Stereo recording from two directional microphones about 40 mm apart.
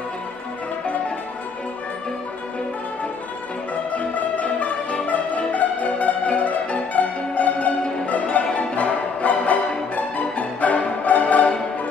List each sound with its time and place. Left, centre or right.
3.9 s music: left